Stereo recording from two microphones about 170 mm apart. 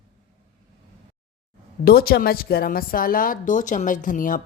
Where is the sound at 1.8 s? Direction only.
60° left (ahead or behind).